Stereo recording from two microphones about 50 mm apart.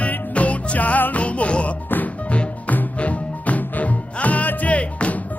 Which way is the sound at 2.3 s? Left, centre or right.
Left.